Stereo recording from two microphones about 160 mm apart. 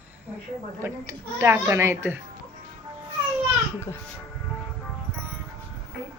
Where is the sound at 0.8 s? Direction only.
15° right (ahead or behind).